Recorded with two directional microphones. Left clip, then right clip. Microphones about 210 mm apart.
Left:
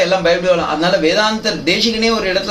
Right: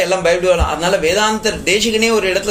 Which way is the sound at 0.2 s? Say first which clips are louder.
Even; 40° right (ahead or behind).